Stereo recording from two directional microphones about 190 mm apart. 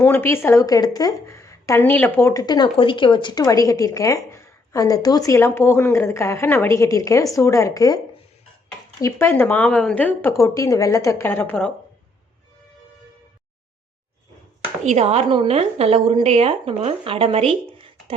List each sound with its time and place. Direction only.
0.0 s a woman's voice: 10° left (ahead or behind)
9.0 s a woman's voice: 15° left (ahead or behind)
14.8 s a woman's voice: 35° right (ahead or behind)